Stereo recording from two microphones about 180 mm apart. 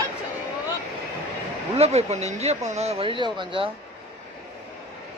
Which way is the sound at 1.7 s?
35° right (ahead or behind).